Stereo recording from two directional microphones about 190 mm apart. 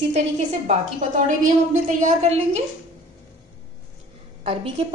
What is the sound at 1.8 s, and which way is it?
Speech, 35° right (ahead or behind).